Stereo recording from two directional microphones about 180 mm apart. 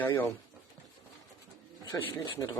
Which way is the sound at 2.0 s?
20° left (ahead or behind).